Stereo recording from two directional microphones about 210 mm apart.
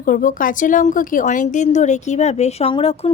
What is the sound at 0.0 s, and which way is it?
A woman's voice, 40° left (ahead or behind).